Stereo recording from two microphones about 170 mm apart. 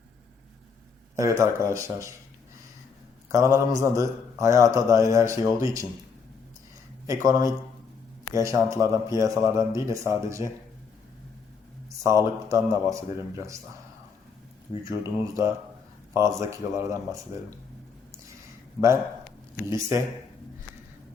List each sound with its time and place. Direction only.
1.1 s a man's voice: 15° right (ahead or behind)
3.3 s a man's voice: 15° right (ahead or behind)
7.1 s a man's voice: 20° right (ahead or behind)
11.9 s a man's voice: 15° right (ahead or behind)
14.8 s a man's voice: 20° right (ahead or behind)
19.5 s a man's voice: 15° right (ahead or behind)